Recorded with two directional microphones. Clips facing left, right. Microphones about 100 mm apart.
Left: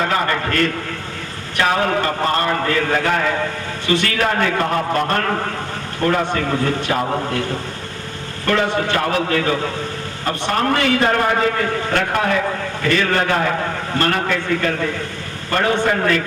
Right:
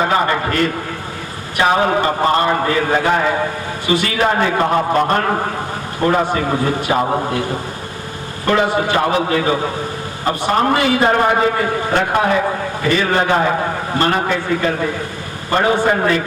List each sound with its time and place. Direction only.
0.0 s a sound: 20° right (ahead or behind)
1.5 s a man's voice: 20° right (ahead or behind)
7.0 s a man's voice: 35° right (ahead or behind)
7.3 s a man's voice: 10° right (ahead or behind); by 12.7 s 30° right (ahead or behind)
12.8 s a man's voice: 20° right (ahead or behind)